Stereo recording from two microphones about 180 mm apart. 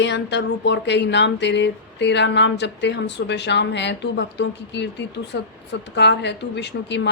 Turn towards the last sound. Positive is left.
turn(degrees=75)  # may be behind; listen again after turning